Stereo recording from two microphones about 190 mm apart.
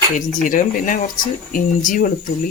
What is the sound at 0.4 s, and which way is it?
Speech, 45° left (ahead or behind).